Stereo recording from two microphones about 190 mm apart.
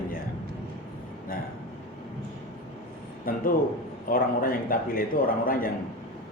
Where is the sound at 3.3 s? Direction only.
50° left (ahead or behind).